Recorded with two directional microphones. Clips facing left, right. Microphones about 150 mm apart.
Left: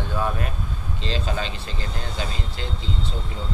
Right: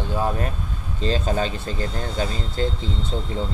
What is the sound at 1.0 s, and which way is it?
Speech, 45° right (ahead or behind).